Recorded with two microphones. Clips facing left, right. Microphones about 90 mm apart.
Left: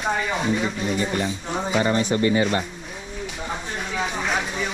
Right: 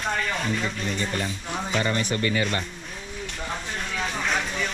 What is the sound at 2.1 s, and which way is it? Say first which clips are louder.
Speech: left 5 dB; 25° left (ahead or behind).